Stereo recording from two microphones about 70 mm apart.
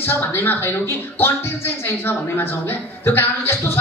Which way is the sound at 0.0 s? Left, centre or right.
Left.